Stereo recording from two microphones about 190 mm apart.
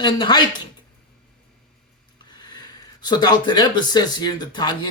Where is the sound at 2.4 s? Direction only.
20° left (ahead or behind).